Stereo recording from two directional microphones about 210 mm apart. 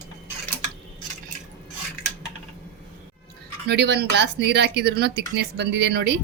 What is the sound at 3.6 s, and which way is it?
A woman's voice, 50° right (ahead or behind).